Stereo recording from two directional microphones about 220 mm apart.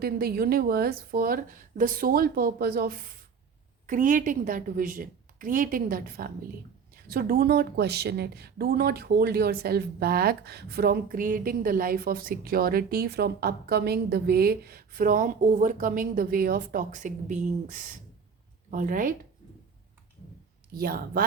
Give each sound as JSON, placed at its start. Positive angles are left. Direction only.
{"t": 0.0, "sound": "a woman's voice", "side_deg": -45}
{"t": 20.7, "sound": "a woman's voice", "side_deg": -45}